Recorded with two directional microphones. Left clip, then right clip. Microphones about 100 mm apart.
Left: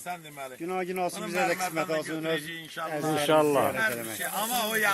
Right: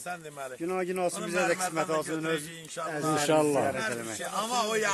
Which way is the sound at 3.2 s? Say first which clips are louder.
Left 3 dB; 35° right (ahead or behind).